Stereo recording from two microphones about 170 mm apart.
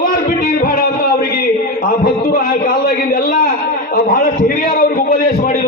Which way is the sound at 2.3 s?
60° left (ahead or behind).